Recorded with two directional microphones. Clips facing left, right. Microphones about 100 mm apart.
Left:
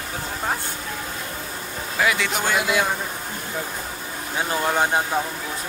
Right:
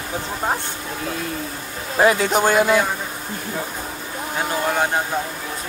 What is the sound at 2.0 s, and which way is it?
Speech, 35° right (ahead or behind).